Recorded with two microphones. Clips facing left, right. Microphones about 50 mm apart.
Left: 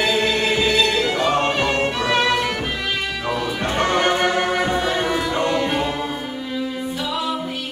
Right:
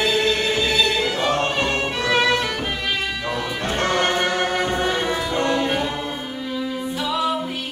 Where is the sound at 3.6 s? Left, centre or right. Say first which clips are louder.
Left 2 dB; centre.